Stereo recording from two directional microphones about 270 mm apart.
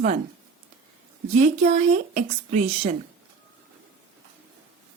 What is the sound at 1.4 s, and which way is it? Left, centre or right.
Speech, right.